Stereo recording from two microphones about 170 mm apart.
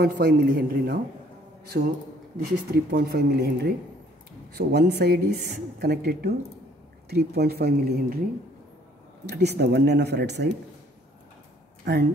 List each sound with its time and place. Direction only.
0.0 s a woman's voice: 70° right (ahead or behind)
2.7 s a woman's voice: 70° right (ahead or behind)
9.2 s a woman's voice: 75° right (ahead or behind)
11.8 s speech: 85° right